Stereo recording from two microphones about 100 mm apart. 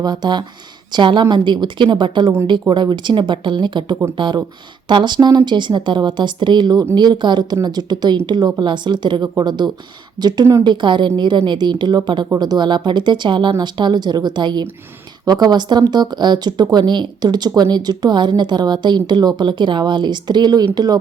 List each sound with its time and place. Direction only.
0.0 s speech: 45° right (ahead or behind)